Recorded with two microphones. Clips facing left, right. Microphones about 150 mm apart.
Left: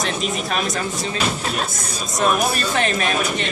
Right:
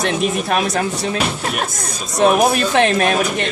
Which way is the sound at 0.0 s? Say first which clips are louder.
Right 5 dB; 65° right (ahead or behind).